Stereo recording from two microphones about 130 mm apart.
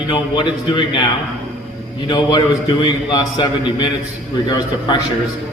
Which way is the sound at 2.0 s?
35° left (ahead or behind).